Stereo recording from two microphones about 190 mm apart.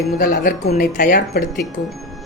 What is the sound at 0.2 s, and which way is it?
Speech, 55° left (ahead or behind).